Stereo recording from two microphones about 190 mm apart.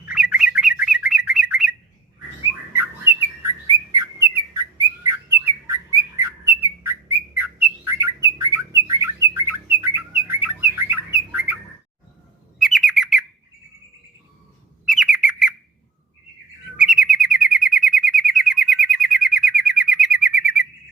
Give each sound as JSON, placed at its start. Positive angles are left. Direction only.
{"t": 0.1, "sound": "bird", "side_deg": -5}
{"t": 3.7, "sound": "bird", "side_deg": -15}
{"t": 12.5, "sound": "bird", "side_deg": 0}
{"t": 14.8, "sound": "bird", "side_deg": -5}
{"t": 16.7, "sound": "bird", "side_deg": -5}